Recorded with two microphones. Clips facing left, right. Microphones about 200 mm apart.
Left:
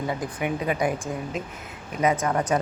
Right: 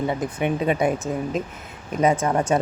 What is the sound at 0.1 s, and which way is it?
Speech, 25° right (ahead or behind).